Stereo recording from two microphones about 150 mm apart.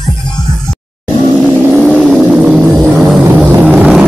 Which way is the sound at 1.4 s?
5° right (ahead or behind).